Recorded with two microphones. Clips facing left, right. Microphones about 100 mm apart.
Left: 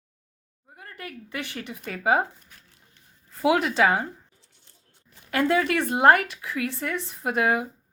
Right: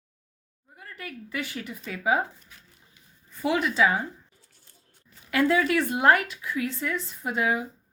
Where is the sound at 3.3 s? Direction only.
90° left; by 4.1 s 65° left (ahead or behind).